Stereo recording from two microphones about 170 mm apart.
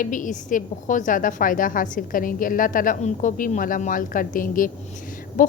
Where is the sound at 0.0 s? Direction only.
50° left (ahead or behind).